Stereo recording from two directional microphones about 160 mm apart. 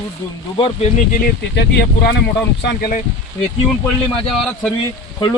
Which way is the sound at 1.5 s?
90° left.